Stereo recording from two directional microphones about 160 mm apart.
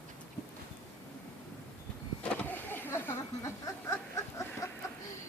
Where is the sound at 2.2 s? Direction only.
10° left (ahead or behind).